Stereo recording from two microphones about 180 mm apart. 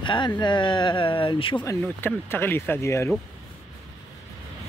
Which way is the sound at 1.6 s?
10° left (ahead or behind).